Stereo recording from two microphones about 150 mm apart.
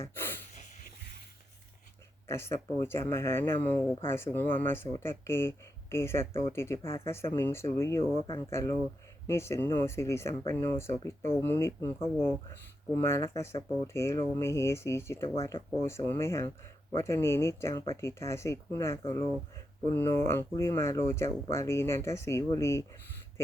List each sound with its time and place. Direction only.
0.0 s snort: 15° left (ahead or behind)
2.2 s speech: 15° left (ahead or behind)
3.5 s speech: 50° right (ahead or behind)
4.1 s speech: 15° left (ahead or behind)